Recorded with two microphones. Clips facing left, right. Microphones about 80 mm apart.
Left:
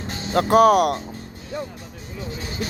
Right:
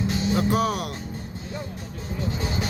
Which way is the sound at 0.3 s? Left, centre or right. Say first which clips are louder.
Left 12 dB; left.